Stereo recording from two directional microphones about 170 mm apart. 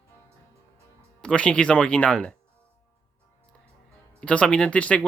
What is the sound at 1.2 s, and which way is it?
Speech, 5° left (ahead or behind).